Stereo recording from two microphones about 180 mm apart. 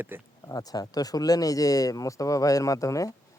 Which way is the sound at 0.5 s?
20° left (ahead or behind).